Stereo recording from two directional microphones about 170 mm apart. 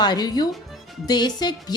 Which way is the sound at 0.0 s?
25° left (ahead or behind).